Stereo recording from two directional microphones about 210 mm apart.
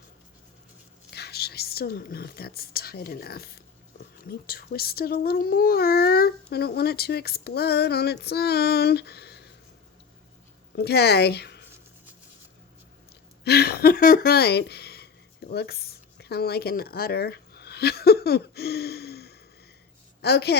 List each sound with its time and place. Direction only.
1.1 s speech: 50° left (ahead or behind)
10.8 s speech: 50° left (ahead or behind)
13.4 s speech: 50° left (ahead or behind)